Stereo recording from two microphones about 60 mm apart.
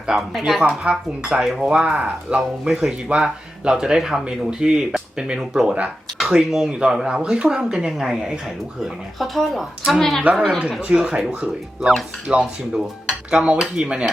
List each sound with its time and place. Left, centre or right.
0.1 s speech: centre
0.6 s speech: right
1.2 s speech: centre
8.8 s speech: centre
10.0 s speech: centre
10.6 s speech: centre
12.4 s speech: centre
13.3 s speech: centre